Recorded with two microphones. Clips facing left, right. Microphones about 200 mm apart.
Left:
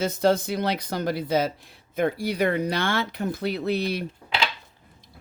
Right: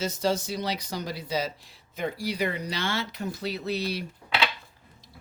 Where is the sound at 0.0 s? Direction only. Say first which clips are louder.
Left 5 dB; 55° left (ahead or behind).